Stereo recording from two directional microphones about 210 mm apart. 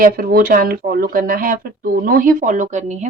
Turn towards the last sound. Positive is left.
turn(degrees=-35)  # may be behind; listen again after turning